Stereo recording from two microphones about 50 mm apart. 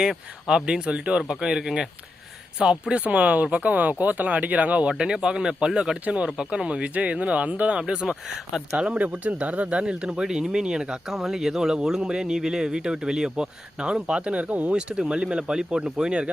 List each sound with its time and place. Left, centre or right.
0.0 s speech: centre
4.9 s speech: centre